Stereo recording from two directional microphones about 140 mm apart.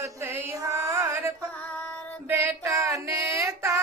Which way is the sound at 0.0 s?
15° right (ahead or behind).